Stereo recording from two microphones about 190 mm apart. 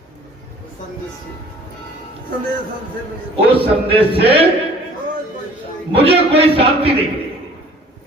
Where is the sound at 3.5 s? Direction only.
30° right (ahead or behind).